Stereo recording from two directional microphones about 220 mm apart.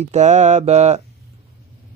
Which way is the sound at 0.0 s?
30° right (ahead or behind).